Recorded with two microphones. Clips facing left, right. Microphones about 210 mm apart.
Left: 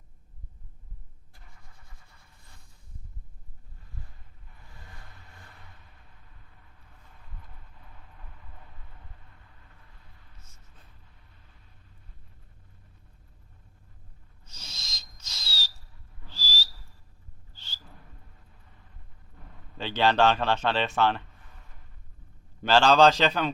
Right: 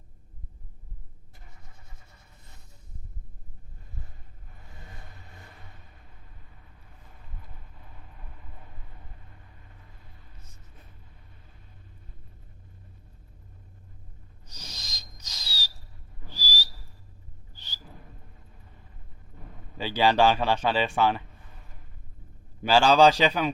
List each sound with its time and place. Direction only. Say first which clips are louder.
2.0 s a sound: right 3 dB; 20° right (ahead or behind)
14.5 s owl: right 3 dB; 15° right (ahead or behind)
16.2 s whistle: right 2 dB; 15° right (ahead or behind)
19.7 s speech: right 1 dB; 10° right (ahead or behind)
22.6 s speech: right 1 dB; 10° right (ahead or behind)